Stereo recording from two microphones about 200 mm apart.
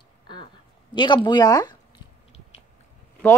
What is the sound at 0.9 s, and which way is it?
Speech, 25° left (ahead or behind).